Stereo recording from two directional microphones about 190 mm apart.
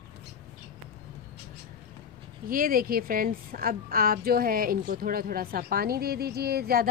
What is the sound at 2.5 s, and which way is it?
A woman's voice, 50° right (ahead or behind).